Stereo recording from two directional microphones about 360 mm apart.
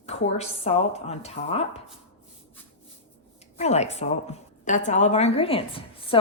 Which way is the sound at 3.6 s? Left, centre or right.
Centre.